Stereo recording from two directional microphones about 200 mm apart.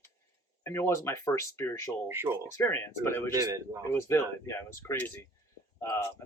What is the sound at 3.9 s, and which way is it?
Speech, 10° left (ahead or behind).